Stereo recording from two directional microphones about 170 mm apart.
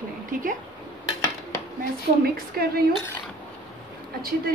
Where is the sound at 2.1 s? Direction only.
70° right (ahead or behind).